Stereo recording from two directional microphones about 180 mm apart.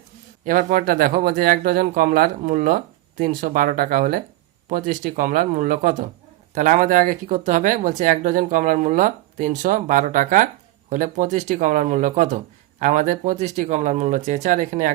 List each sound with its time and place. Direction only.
0.4 s speech: 50° right (ahead or behind)